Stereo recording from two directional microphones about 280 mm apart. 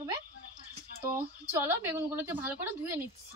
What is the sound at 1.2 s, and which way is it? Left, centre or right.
A woman's voice, centre.